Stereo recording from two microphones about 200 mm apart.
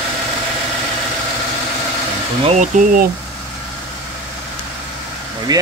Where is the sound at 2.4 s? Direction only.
40° right (ahead or behind).